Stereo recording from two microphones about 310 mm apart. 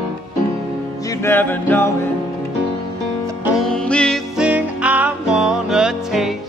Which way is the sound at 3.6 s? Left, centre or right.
Centre.